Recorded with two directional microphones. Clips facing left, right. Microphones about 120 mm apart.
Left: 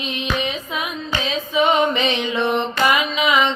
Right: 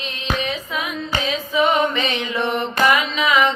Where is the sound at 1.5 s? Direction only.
20° left (ahead or behind).